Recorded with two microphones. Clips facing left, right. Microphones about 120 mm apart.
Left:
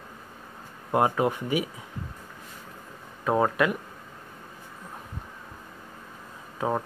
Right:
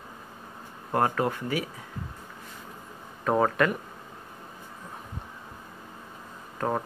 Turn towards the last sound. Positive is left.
turn(degrees=5)  # may be behind; listen again after turning